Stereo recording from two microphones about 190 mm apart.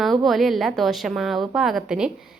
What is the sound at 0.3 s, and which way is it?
A woman's voice, centre (ahead or behind).